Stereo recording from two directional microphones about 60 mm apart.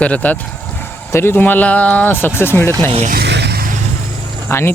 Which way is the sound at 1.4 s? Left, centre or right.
Left.